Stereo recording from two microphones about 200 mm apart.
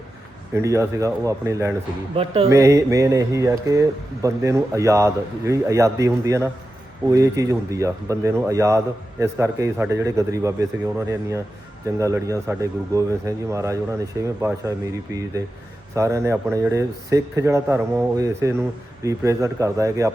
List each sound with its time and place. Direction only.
0.5 s speech: 15° right (ahead or behind)
2.1 s speech: 30° right (ahead or behind)
2.5 s speech: 15° right (ahead or behind)